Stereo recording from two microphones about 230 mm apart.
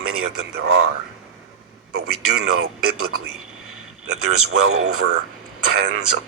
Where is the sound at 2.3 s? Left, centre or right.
Right.